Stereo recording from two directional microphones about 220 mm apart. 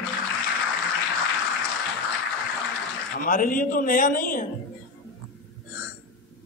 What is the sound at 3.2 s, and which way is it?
A man's voice, 40° left (ahead or behind).